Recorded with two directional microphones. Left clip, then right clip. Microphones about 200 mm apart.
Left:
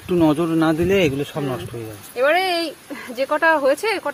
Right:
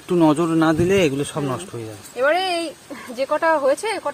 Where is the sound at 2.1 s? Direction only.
20° left (ahead or behind).